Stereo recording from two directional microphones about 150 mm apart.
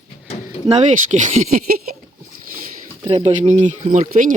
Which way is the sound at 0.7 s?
50° right (ahead or behind).